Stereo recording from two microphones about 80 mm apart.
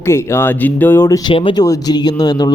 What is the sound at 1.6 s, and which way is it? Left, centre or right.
Speech, left.